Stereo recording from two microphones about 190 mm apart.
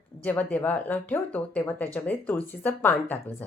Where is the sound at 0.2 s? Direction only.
10° left (ahead or behind).